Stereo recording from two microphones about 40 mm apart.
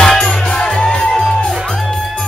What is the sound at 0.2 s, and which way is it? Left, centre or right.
Music, centre.